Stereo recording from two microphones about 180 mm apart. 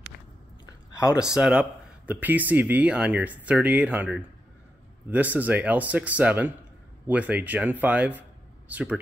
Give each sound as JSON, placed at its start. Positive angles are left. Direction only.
{"t": 0.9, "sound": "speech", "side_deg": 20}
{"t": 1.2, "sound": "speech", "side_deg": -5}